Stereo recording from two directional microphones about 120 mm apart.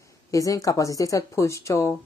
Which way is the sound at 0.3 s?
30° left (ahead or behind).